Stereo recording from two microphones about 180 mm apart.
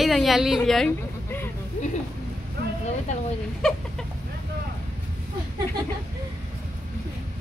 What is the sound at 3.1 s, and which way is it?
Speech, 40° left (ahead or behind).